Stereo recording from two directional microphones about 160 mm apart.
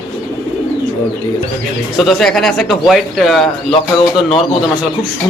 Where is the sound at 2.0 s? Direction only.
Centre (ahead or behind).